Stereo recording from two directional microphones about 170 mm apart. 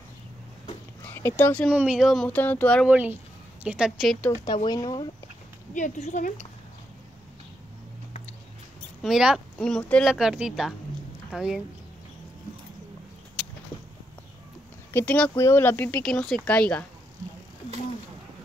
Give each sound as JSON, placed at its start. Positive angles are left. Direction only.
{"t": 1.0, "sound": "speech", "side_deg": 15}
{"t": 1.7, "sound": "speech", "side_deg": -5}
{"t": 2.9, "sound": "speech", "side_deg": -10}
{"t": 4.6, "sound": "speech", "side_deg": 25}
{"t": 5.8, "sound": "speech", "side_deg": 45}
{"t": 9.0, "sound": "speech", "side_deg": -5}
{"t": 14.9, "sound": "speech", "side_deg": 10}